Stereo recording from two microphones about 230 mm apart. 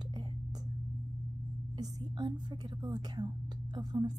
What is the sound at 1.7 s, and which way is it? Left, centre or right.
A woman's voice, centre.